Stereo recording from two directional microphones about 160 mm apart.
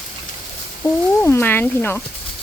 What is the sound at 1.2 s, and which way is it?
Speech, 15° left (ahead or behind).